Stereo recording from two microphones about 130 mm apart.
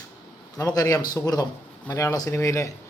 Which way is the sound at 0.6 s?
25° left (ahead or behind).